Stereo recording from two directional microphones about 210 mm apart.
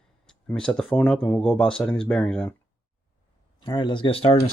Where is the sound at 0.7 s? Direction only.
5° left (ahead or behind).